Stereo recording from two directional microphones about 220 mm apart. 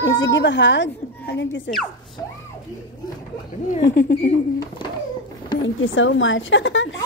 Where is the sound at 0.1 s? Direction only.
55° left (ahead or behind).